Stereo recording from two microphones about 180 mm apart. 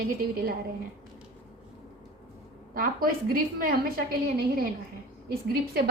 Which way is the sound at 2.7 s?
55° right (ahead or behind).